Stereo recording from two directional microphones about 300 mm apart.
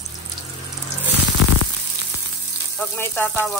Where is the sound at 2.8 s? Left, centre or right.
Centre.